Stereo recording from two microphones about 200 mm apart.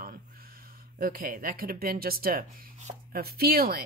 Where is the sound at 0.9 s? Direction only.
45° right (ahead or behind).